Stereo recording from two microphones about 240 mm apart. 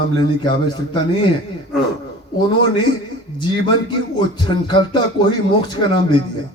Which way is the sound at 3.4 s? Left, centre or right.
Centre.